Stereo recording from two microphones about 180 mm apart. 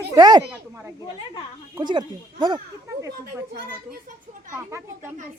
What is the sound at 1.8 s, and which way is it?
Speech, 25° right (ahead or behind).